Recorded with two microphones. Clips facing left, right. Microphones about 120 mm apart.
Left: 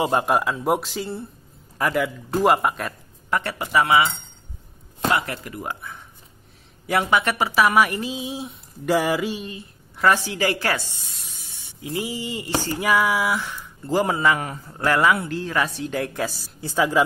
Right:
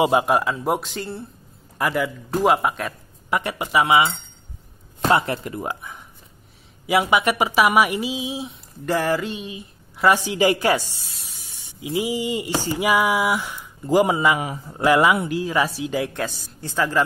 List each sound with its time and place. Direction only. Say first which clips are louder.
0.0 s a man's voice: right 2 dB; 5° right (ahead or behind)
3.3 s speech: right 1 dB; 15° right (ahead or behind)
5.1 s speech: right 6 dB; 25° right (ahead or behind); by 9.5 s 5° left (ahead or behind)
9.5 s speech: right 1 dB; 10° right (ahead or behind); by 17.0 s 10° left (ahead or behind)